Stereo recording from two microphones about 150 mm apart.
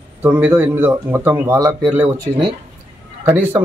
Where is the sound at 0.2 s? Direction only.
10° right (ahead or behind).